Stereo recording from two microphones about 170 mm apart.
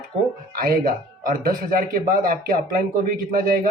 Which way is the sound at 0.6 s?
55° right (ahead or behind).